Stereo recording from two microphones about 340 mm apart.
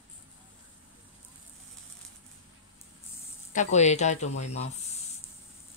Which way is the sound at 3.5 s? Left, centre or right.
Left.